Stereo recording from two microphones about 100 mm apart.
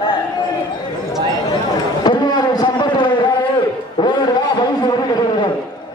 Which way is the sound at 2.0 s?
45° left (ahead or behind).